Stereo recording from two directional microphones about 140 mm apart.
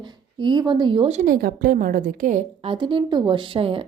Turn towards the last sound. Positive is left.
turn(degrees=-40)  # may be behind; listen again after turning